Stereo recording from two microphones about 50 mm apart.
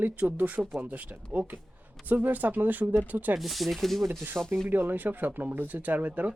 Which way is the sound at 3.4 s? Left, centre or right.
Centre.